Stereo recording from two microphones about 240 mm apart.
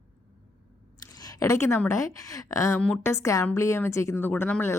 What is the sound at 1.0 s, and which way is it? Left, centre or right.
Speech, centre.